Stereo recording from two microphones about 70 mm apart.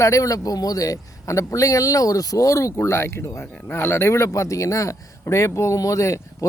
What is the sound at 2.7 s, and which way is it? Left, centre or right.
Speech, left.